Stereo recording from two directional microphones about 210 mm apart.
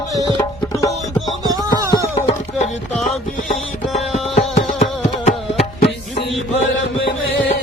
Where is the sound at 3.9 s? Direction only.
35° left (ahead or behind).